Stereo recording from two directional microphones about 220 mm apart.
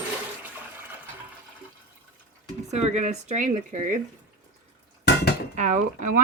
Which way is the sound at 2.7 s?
30° right (ahead or behind).